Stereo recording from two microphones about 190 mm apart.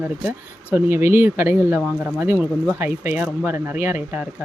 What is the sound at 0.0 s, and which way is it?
Speech, 10° right (ahead or behind).